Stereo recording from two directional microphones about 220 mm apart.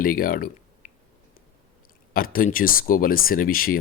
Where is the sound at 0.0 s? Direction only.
40° left (ahead or behind).